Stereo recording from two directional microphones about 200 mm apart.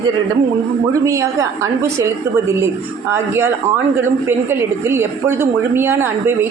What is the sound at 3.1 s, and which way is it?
A woman's voice, 10° right (ahead or behind).